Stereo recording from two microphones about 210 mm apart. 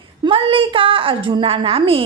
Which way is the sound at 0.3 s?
25° right (ahead or behind).